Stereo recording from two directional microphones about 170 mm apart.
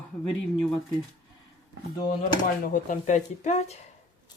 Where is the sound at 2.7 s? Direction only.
50° left (ahead or behind).